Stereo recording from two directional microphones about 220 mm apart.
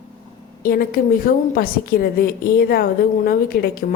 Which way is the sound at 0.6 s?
40° left (ahead or behind).